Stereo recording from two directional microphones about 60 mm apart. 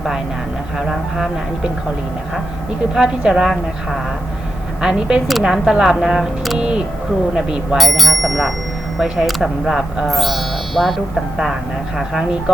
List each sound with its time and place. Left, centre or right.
0.8 s speech: centre
2.9 s speech: centre
4.8 s speech: centre
6.6 s speech: centre